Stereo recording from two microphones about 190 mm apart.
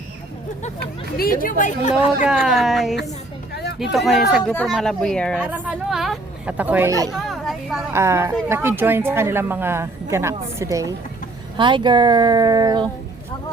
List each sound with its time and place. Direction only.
0.8 s speech: 55° left (ahead or behind)
2.2 s speech: centre (ahead or behind)
3.5 s a sound: 60° left (ahead or behind)
3.9 s speech: centre (ahead or behind)
5.4 s a woman's voice: 10° right (ahead or behind)
7.1 s a sound: centre (ahead or behind)
7.9 s a woman's voice: 15° right (ahead or behind)